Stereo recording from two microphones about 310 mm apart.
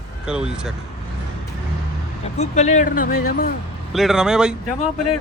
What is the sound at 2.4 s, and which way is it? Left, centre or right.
Speech, left.